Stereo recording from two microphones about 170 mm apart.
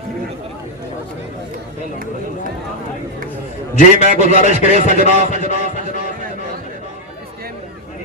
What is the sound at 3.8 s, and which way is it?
A man's voice, 45° left (ahead or behind).